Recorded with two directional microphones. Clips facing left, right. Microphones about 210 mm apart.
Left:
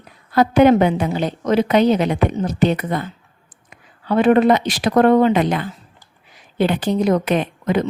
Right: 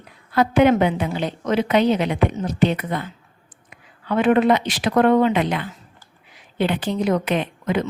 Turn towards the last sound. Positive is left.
turn(degrees=40)  # may be behind; listen again after turning